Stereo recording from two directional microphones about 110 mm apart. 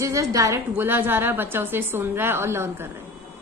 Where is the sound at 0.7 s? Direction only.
20° right (ahead or behind).